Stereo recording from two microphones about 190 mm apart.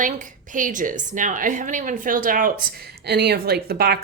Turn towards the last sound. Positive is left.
turn(degrees=-55)  # may be behind; listen again after turning